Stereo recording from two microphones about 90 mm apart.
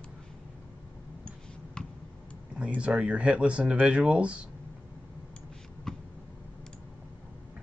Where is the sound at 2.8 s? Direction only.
15° right (ahead or behind).